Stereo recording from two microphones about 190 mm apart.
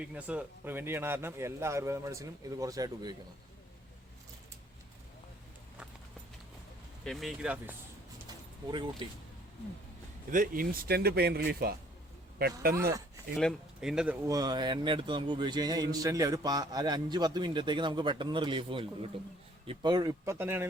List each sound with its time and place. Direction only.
0.0 s speech: 5° right (ahead or behind)
7.0 s speech: centre (ahead or behind)
8.7 s speech: 25° right (ahead or behind)
10.3 s speech: 45° right (ahead or behind)
13.4 s speech: centre (ahead or behind)